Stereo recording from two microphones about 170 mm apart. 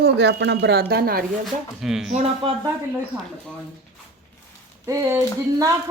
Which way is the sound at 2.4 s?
30° right (ahead or behind).